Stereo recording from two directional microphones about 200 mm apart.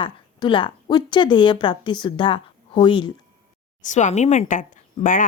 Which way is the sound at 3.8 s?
40° left (ahead or behind).